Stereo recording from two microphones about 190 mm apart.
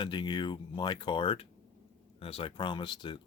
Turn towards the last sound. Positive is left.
turn(degrees=25)  # may be behind; listen again after turning